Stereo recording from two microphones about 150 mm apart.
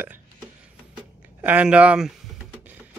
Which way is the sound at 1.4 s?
10° right (ahead or behind).